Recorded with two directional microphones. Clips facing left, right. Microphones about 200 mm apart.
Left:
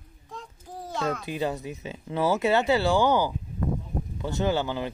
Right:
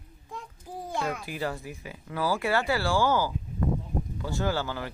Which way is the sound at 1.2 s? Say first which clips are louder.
Left 4 dB; 20° left (ahead or behind).